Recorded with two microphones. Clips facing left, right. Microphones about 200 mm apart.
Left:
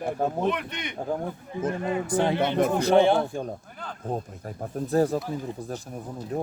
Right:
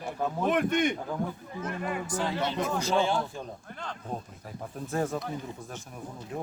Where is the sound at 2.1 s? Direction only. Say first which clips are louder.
Left 8 dB; 60° left (ahead or behind).